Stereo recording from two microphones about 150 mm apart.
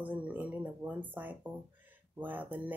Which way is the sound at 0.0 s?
10° right (ahead or behind).